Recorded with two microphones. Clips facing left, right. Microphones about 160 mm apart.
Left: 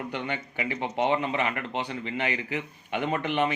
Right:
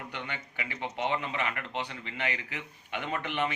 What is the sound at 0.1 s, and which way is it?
Speech, 25° left (ahead or behind).